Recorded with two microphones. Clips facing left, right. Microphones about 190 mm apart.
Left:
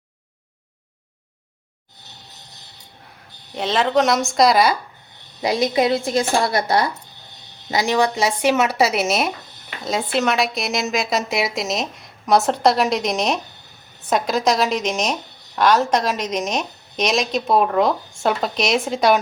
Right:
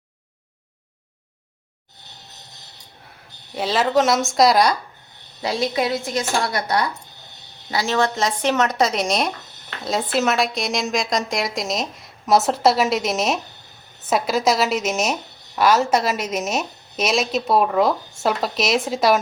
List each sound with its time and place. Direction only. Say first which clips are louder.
3.5 s speech: even; 5° right (ahead or behind)
5.4 s speech: left 4 dB; 15° left (ahead or behind)
7.7 s speech: left 2 dB; 15° left (ahead or behind); by 19.2 s centre (ahead or behind)